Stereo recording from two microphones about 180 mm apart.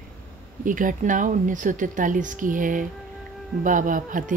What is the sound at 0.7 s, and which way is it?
Speech, 45° right (ahead or behind).